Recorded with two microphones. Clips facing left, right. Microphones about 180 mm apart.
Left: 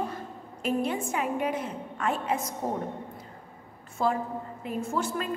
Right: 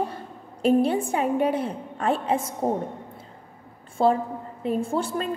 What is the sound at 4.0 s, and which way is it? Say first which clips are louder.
A woman's voice: right 6 dB; 30° right (ahead or behind).